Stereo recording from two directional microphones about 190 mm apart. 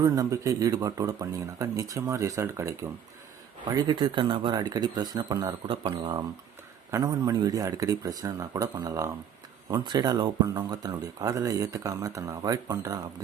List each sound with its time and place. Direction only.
0.0 s speech: 15° right (ahead or behind)